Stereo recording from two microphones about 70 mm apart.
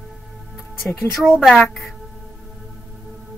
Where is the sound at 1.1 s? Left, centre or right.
Centre.